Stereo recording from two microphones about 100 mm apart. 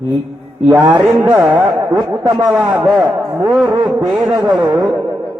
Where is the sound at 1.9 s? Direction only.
Centre (ahead or behind).